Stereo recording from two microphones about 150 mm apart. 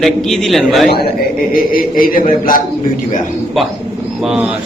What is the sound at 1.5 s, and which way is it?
Mantra, 75° left (ahead or behind).